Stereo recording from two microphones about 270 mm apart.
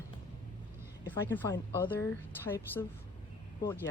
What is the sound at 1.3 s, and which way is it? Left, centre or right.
Speech, centre.